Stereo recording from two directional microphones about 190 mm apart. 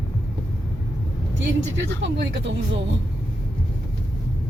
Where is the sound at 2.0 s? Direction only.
65° right (ahead or behind).